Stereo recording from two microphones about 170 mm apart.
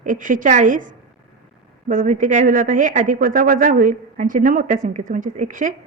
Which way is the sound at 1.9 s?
50° right (ahead or behind).